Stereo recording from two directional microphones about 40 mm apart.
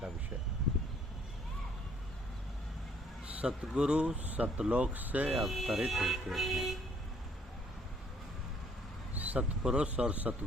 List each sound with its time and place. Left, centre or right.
3.4 s speech: right
4.2 s speech: right
4.5 s speech: right
4.9 s speech: right
5.4 s speech: centre
9.1 s a sound: right
9.7 s speech: right